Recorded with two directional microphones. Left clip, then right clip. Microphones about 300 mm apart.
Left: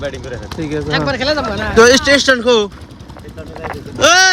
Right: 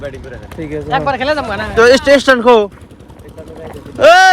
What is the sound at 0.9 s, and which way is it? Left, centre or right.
Speech, centre.